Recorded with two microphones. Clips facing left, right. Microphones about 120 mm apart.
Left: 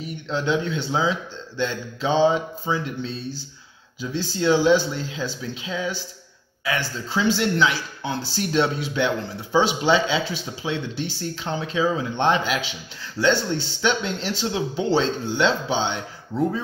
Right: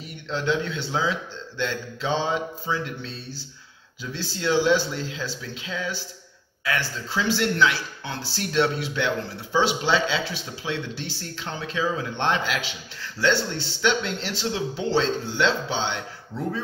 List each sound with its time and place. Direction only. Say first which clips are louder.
0.3 s speech: left 2 dB; 20° left (ahead or behind)